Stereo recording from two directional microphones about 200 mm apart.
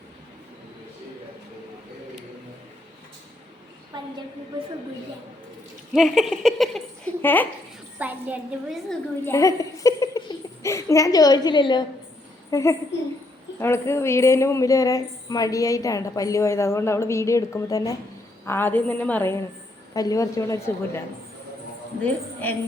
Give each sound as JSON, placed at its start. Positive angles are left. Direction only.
{"t": 5.9, "sound": "speech", "side_deg": 0}
{"t": 7.9, "sound": "a woman's voice", "side_deg": -10}
{"t": 8.9, "sound": "a woman's voice", "side_deg": 15}
{"t": 22.0, "sound": "a woman's voice", "side_deg": 10}